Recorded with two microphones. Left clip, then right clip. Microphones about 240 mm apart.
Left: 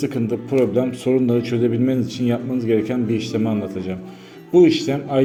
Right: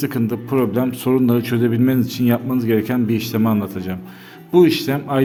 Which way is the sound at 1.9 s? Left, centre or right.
Right.